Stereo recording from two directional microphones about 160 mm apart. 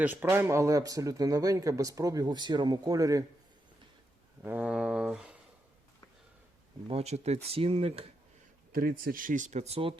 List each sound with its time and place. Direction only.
0.0 s speech: 10° right (ahead or behind)
4.4 s a sound: 10° right (ahead or behind)
6.8 s speech: 40° right (ahead or behind)
8.7 s speech: 65° right (ahead or behind); by 10.0 s 35° right (ahead or behind)